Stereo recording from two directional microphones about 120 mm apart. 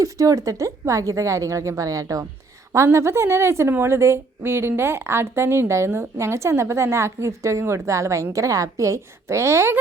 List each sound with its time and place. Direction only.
0.0 s a woman's voice: 30° right (ahead or behind)